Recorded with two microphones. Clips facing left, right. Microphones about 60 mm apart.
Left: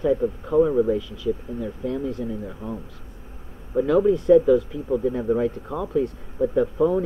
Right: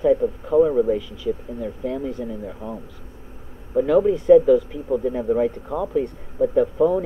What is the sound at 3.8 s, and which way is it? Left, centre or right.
Speech, centre.